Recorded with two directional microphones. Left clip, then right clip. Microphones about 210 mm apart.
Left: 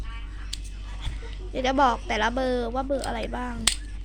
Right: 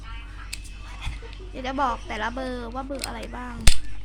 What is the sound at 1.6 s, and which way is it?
Speech, 20° left (ahead or behind).